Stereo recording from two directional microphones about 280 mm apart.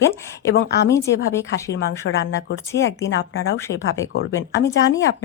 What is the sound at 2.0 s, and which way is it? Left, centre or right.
Speech, left.